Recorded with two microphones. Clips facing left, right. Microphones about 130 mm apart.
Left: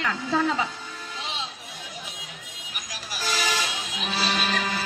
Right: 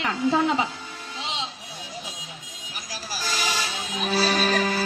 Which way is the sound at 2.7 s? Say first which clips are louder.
Right 3 dB; 35° right (ahead or behind).